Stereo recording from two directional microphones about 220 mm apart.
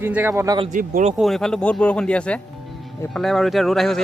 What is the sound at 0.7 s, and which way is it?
Speech, 35° right (ahead or behind).